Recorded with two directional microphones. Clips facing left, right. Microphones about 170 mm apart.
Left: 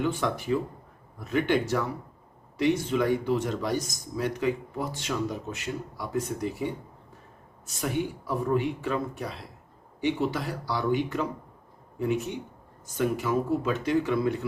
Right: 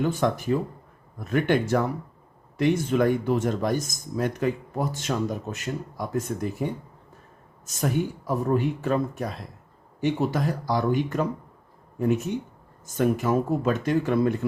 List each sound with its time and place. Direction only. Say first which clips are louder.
0.0 s speech: right 4 dB; 45° right (ahead or behind)